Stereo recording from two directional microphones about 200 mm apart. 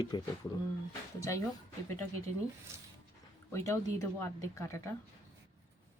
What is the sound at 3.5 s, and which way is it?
Speech, 15° left (ahead or behind).